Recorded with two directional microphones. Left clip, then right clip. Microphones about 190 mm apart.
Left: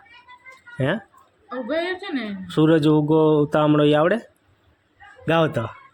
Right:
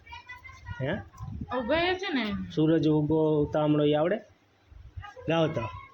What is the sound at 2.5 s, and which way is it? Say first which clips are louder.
Speech: left 8 dB; 35° left (ahead or behind).